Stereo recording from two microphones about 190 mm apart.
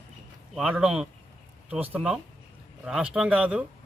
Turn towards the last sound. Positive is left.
turn(degrees=-5)  # may be behind; listen again after turning